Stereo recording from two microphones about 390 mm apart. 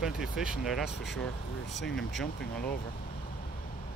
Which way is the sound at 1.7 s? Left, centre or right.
Left.